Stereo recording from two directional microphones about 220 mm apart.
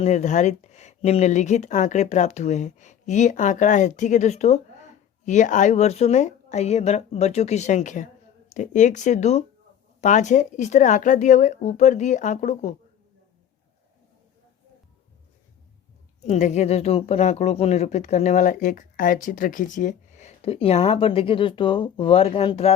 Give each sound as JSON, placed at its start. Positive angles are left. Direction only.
{"t": 0.0, "sound": "speech", "side_deg": 30}
{"t": 16.2, "sound": "speech", "side_deg": 30}